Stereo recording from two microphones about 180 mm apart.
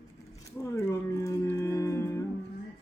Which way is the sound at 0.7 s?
15° left (ahead or behind).